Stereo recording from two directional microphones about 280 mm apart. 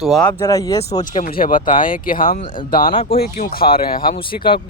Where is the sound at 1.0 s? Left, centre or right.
Left.